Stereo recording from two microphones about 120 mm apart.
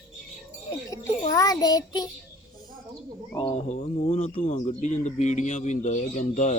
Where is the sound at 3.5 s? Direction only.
70° left (ahead or behind).